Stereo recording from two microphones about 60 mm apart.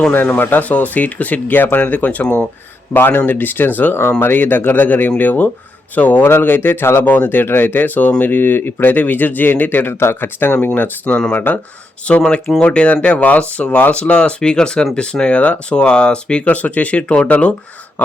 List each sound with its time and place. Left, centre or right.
0.1 s speech: left
7.0 s speech: left
12.0 s speech: centre